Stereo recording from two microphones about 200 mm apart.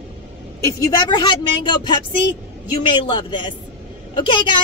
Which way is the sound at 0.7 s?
20° left (ahead or behind).